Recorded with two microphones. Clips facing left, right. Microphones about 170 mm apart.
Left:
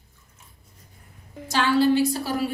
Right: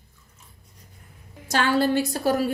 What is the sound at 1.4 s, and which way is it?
A woman's voice, 50° right (ahead or behind).